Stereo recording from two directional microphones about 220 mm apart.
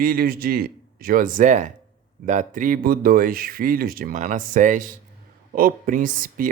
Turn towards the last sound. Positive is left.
turn(degrees=-40)  # may be behind; listen again after turning